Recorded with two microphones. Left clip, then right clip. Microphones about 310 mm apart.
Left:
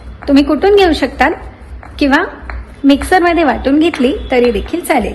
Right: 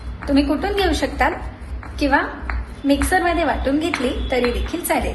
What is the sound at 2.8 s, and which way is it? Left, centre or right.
A woman's voice, left.